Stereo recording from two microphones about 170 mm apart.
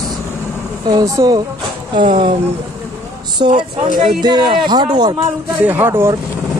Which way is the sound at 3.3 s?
25° right (ahead or behind).